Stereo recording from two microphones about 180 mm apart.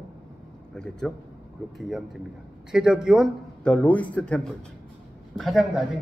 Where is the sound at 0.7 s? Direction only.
5° left (ahead or behind).